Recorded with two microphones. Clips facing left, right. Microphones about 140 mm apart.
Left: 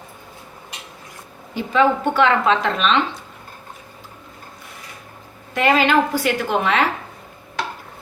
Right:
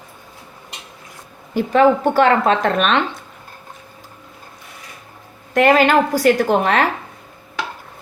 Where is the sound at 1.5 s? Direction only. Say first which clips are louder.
Right 4 dB; 45° right (ahead or behind).